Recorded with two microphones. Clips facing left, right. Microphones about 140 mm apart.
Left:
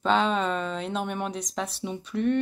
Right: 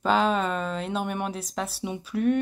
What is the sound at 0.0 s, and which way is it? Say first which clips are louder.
Speech: right 1 dB; 5° right (ahead or behind).